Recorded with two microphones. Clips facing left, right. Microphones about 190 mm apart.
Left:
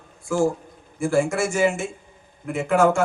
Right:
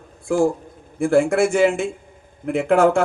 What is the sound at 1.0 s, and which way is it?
A man's voice, 55° right (ahead or behind).